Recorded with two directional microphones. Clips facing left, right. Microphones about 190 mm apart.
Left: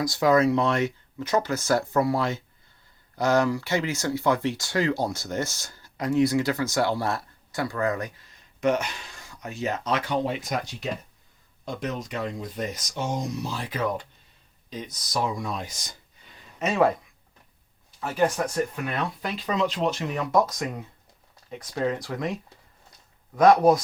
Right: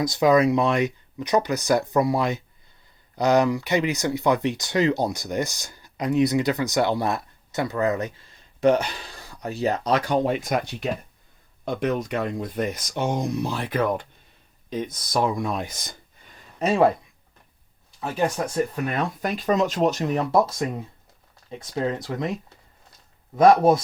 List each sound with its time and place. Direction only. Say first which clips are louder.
0.0 s speech: right 2 dB; 20° right (ahead or behind); by 16.3 s 55° right (ahead or behind)
16.6 s speech: right 3 dB; 30° right (ahead or behind)
18.9 s speech: right 4 dB; 45° right (ahead or behind); by 22.3 s 20° right (ahead or behind)
23.3 s speech: right 1 dB; 25° right (ahead or behind)